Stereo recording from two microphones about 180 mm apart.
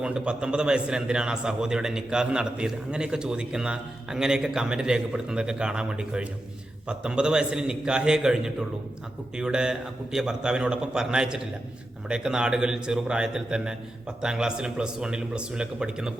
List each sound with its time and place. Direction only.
0.0 s a man's voice: 5° right (ahead or behind)